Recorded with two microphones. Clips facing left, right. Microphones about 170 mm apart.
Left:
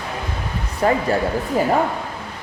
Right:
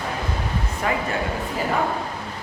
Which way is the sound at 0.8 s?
40° left (ahead or behind).